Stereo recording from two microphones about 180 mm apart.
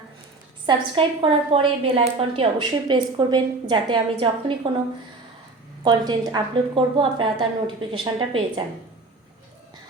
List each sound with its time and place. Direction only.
0.6 s a woman's voice: 25° right (ahead or behind)
5.8 s a woman's voice: 25° right (ahead or behind)